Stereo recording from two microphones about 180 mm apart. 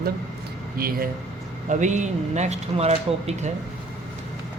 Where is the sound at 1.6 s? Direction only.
40° right (ahead or behind).